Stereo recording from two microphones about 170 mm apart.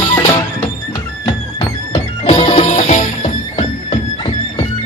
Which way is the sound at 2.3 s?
35° left (ahead or behind).